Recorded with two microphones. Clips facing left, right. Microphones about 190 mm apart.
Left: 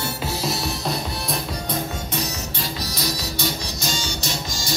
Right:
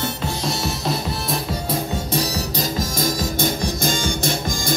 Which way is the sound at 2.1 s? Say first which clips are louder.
Right 5 dB; 35° right (ahead or behind).